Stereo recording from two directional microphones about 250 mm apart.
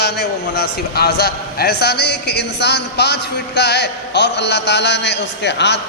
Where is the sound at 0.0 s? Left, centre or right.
Left.